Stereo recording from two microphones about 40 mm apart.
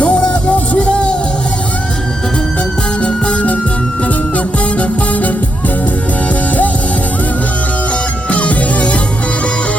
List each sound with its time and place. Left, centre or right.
0.0 s music: left
3.0 s music: left
8.3 s music: left